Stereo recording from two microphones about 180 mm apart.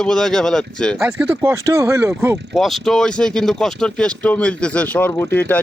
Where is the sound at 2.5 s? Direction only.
Centre (ahead or behind).